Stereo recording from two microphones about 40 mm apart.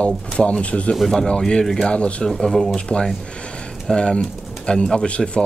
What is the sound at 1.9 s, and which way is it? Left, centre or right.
Speech, left.